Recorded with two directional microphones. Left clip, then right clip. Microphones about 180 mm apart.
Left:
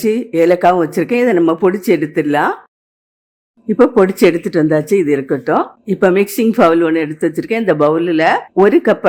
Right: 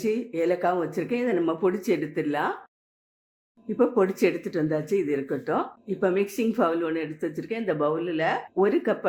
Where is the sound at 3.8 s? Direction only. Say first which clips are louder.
Left 12 dB; 30° left (ahead or behind).